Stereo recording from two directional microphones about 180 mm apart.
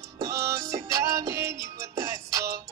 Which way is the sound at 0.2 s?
15° right (ahead or behind).